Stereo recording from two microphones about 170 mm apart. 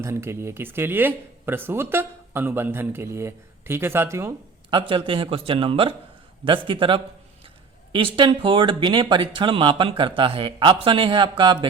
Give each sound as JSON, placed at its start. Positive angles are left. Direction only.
{"t": 0.0, "sound": "speech", "side_deg": -15}
{"t": 4.7, "sound": "speech", "side_deg": -30}